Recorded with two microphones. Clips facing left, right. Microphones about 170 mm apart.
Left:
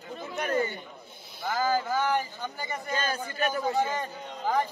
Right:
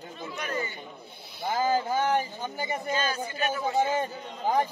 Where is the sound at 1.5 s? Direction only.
20° right (ahead or behind).